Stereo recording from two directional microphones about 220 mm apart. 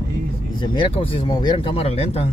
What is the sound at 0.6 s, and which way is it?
Speech, 20° left (ahead or behind).